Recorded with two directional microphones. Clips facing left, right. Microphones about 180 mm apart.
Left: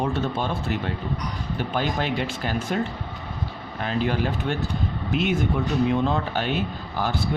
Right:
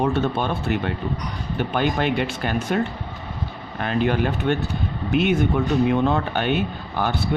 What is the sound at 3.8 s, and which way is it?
Speech, 60° right (ahead or behind).